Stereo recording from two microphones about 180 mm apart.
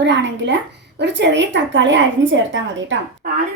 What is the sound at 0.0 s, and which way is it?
A woman's voice, 75° right (ahead or behind).